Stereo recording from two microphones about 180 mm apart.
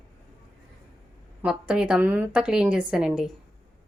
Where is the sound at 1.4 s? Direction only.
5° right (ahead or behind).